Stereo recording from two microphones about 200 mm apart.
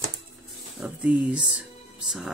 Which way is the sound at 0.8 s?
5° right (ahead or behind).